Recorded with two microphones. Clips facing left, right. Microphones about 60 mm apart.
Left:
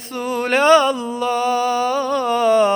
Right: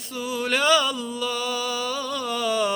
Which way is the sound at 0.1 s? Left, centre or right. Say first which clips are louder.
Left 6 dB; left.